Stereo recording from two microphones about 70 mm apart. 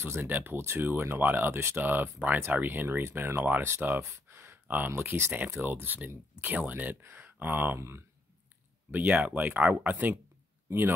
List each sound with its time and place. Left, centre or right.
0.0 s speech: right
1.9 s speech: right
8.9 s speech: right